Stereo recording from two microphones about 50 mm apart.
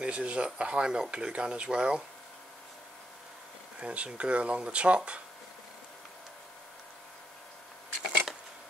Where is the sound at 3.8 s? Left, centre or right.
Right.